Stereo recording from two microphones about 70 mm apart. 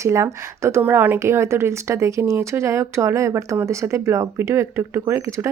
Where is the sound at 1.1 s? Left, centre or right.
Right.